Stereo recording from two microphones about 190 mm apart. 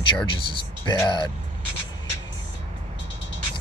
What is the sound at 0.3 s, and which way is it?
Speech, 25° left (ahead or behind).